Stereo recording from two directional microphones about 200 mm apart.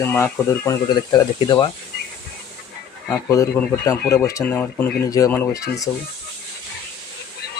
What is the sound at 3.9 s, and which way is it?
Speech, 15° left (ahead or behind).